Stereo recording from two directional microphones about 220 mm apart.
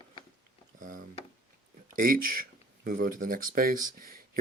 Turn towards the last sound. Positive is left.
turn(degrees=-40)  # may be behind; listen again after turning